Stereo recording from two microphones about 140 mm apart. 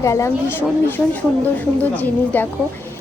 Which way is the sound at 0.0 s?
20° left (ahead or behind).